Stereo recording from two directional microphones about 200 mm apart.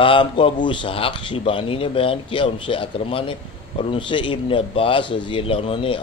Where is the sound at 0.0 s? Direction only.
25° left (ahead or behind).